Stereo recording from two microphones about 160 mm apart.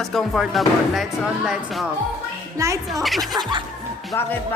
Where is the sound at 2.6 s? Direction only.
20° right (ahead or behind).